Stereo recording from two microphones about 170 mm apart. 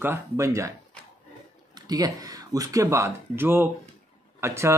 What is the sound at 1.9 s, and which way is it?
Speech, 20° right (ahead or behind).